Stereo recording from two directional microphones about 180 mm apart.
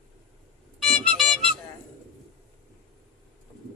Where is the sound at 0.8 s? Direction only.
Centre (ahead or behind).